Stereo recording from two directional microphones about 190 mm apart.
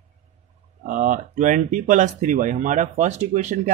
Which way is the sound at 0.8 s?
40° right (ahead or behind).